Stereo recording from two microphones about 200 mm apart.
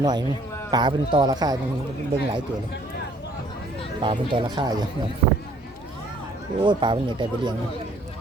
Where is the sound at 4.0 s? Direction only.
25° right (ahead or behind).